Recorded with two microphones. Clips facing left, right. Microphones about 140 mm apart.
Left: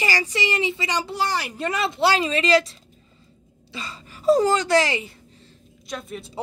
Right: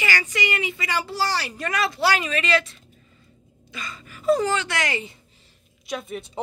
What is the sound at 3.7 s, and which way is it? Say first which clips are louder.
A woman's voice: left 1 dB; 30° left (ahead or behind).